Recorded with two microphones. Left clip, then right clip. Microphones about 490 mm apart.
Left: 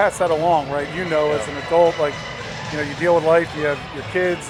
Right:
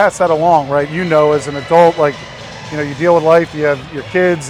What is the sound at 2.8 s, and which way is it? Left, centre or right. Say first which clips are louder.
Speech: right 6 dB; right.